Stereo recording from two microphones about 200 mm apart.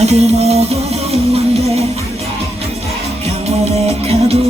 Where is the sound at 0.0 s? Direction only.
30° right (ahead or behind).